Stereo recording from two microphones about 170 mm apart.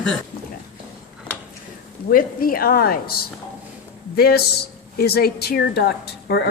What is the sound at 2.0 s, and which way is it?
A woman's voice, 55° left (ahead or behind).